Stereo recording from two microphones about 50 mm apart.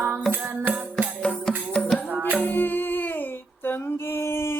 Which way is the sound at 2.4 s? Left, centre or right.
Left.